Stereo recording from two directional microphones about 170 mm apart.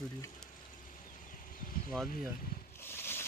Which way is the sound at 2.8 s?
15° left (ahead or behind).